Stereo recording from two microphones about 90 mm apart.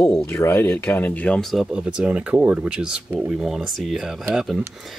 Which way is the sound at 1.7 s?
10° right (ahead or behind).